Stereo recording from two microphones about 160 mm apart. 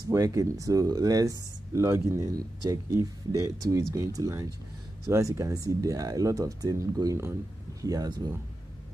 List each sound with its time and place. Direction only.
0.1 s speech: 20° right (ahead or behind)